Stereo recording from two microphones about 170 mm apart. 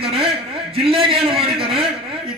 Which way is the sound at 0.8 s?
35° right (ahead or behind).